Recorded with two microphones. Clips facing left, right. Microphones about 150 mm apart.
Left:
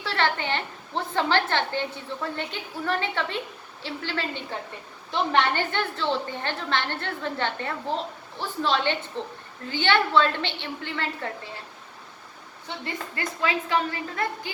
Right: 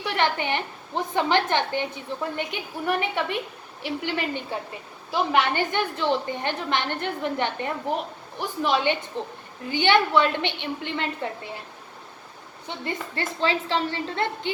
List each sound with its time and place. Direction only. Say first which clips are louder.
0.0 s a woman's voice: right 1 dB; 15° right (ahead or behind)
12.6 s a woman's voice: right 2 dB; 25° right (ahead or behind)